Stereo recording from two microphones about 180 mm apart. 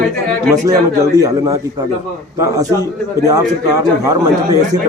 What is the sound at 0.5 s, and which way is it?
A man's voice, 20° right (ahead or behind).